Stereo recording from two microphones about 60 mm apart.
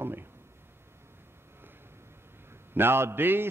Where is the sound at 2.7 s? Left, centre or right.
Right.